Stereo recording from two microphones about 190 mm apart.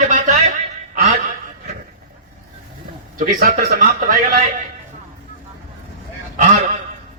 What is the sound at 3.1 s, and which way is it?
Speech, 50° right (ahead or behind).